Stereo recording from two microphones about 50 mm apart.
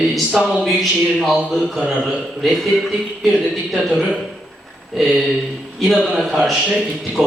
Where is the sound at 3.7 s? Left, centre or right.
Centre.